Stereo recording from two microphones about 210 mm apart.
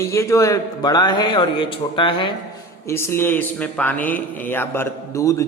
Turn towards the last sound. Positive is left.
turn(degrees=15)  # may be behind; listen again after turning